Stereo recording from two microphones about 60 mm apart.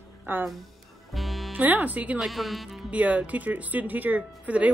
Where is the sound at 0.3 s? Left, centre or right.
Right.